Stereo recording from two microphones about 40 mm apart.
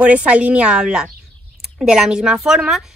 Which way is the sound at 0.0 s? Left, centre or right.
Right.